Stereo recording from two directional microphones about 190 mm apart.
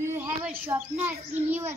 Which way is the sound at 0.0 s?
15° right (ahead or behind).